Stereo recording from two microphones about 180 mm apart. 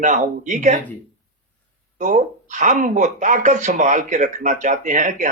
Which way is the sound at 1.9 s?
45° right (ahead or behind).